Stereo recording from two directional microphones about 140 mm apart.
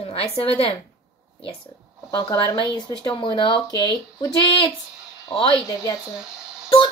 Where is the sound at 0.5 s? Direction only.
45° left (ahead or behind).